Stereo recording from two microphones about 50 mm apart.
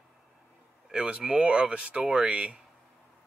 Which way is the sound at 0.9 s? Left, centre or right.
Centre.